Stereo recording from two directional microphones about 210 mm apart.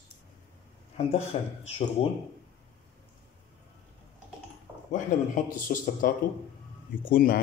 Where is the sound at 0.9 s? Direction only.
30° left (ahead or behind).